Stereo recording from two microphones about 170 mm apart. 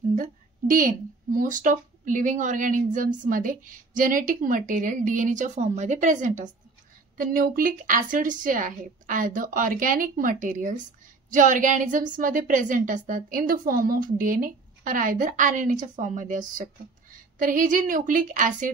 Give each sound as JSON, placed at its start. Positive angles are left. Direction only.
{"t": 0.1, "sound": "a woman's voice", "side_deg": -50}